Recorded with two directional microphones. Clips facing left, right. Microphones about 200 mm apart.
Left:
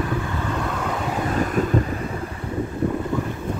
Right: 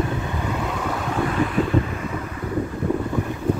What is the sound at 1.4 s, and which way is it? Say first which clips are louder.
Wind noise: even; 45° left (ahead or behind).